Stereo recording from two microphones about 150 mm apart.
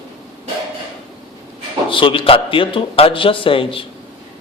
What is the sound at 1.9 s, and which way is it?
A man's voice, 35° left (ahead or behind).